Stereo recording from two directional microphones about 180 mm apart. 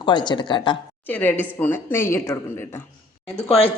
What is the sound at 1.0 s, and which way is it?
A woman's voice, 10° left (ahead or behind).